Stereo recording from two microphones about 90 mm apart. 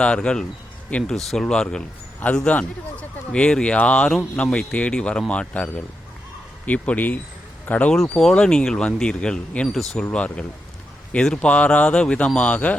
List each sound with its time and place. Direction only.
0.0 s speech: 10° left (ahead or behind)
1.1 s speech: 5° left (ahead or behind)
7.9 s speech: 5° left (ahead or behind)